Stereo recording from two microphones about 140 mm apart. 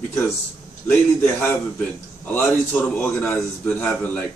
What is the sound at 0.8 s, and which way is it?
A man's voice, 15° left (ahead or behind).